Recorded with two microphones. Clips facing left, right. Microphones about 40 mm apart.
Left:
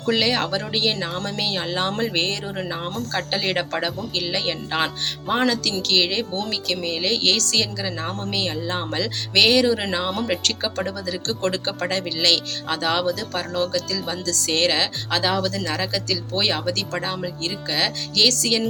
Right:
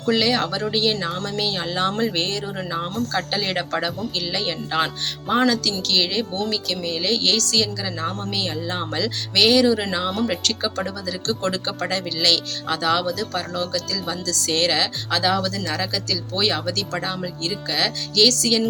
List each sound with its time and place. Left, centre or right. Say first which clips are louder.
0.1 s speech: right 1 dB; left
2.1 s speech: left 1 dB; left
3.1 s speech: even; left
9.3 s speech: right 1 dB; left
9.7 s speech: right 1 dB; centre
10.4 s speech: even; left